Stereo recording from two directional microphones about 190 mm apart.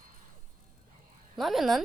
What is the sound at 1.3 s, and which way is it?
Speech, centre (ahead or behind).